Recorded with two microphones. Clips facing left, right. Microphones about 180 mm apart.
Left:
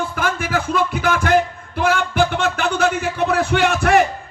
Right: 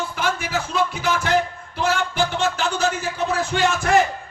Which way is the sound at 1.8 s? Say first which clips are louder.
Left 4 dB; 55° left (ahead or behind).